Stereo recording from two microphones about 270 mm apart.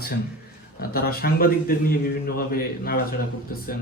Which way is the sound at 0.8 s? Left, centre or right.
Left.